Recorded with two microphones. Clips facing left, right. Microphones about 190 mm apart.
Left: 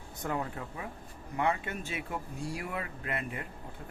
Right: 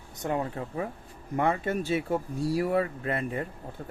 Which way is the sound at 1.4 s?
45° right (ahead or behind).